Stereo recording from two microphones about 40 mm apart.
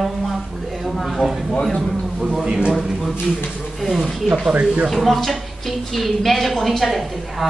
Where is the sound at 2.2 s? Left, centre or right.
Centre.